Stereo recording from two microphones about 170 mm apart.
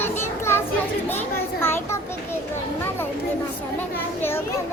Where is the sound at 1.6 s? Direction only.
15° left (ahead or behind).